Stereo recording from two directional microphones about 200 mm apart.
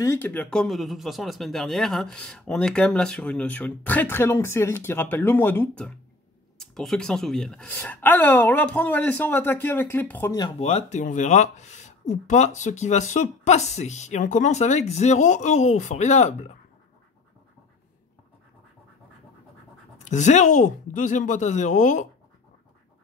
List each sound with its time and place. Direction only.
0.0 s speech: 10° left (ahead or behind)
10.6 s speech: 30° left (ahead or behind)
20.1 s speech: 35° left (ahead or behind)